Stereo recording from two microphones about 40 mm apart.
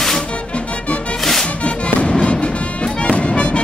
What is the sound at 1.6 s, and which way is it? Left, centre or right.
Music, left.